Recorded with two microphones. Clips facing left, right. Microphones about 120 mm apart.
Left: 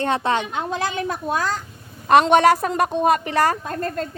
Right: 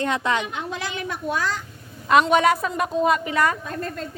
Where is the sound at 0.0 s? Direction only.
30° left (ahead or behind).